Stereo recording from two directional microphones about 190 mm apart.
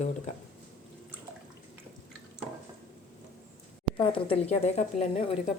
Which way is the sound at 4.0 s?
30° left (ahead or behind).